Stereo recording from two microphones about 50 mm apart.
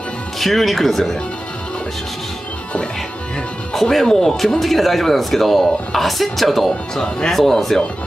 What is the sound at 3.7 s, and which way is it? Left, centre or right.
Speech, centre.